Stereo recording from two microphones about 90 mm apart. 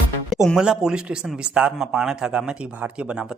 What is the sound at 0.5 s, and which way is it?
Speech, 10° right (ahead or behind).